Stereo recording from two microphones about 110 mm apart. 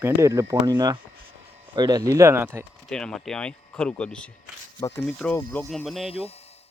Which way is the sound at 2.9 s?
5° left (ahead or behind).